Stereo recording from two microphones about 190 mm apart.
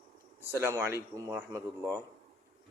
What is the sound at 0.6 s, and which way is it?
A man's voice, 10° right (ahead or behind).